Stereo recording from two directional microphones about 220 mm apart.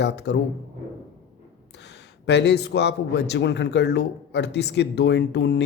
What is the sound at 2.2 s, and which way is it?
Speech, 50° left (ahead or behind).